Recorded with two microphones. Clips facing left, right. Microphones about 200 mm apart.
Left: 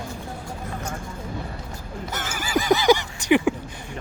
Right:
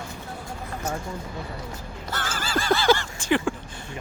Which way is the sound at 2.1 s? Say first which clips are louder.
Left 2 dB; 15° left (ahead or behind).